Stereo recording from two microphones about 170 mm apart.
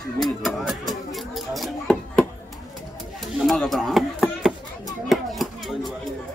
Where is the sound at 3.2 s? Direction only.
Centre (ahead or behind).